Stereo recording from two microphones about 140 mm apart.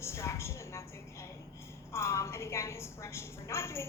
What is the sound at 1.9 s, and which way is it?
A woman's voice, 20° left (ahead or behind).